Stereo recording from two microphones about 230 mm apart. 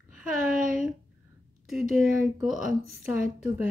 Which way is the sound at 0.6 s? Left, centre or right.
Right.